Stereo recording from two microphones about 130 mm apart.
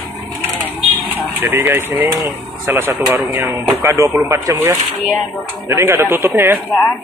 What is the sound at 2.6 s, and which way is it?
Speech, 15° right (ahead or behind).